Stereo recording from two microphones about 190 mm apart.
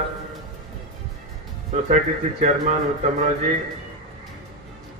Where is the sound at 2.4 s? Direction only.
35° right (ahead or behind).